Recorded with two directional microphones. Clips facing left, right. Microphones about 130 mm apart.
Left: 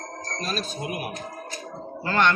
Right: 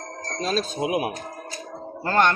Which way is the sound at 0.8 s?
90° right.